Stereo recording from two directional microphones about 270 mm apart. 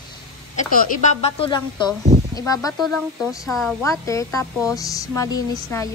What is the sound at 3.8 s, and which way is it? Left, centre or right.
Speech, centre.